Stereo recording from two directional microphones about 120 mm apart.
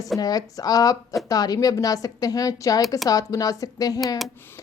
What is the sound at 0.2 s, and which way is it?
Speech, 30° left (ahead or behind).